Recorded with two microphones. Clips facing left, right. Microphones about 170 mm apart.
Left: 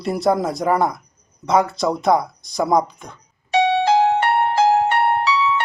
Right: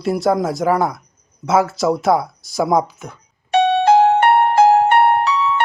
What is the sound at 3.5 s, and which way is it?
Music, 60° right (ahead or behind).